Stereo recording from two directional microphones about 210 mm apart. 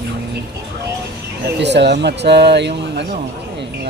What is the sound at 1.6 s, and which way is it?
Speech, 55° right (ahead or behind).